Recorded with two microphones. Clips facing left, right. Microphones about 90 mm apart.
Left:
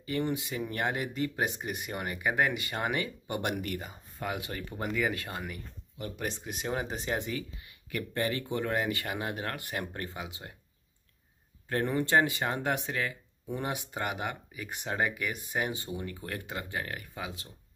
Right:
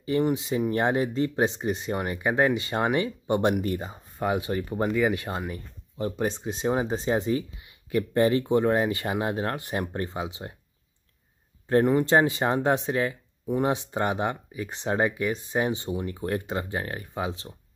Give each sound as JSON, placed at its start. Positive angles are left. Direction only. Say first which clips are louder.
{"t": 0.0, "sound": "speech", "louder": "right 7 dB", "side_deg": -25}
{"t": 11.7, "sound": "speech", "louder": "right 7 dB", "side_deg": -20}